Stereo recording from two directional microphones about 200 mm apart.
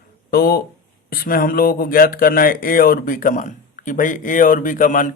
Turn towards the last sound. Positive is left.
turn(degrees=40)  # may be behind; listen again after turning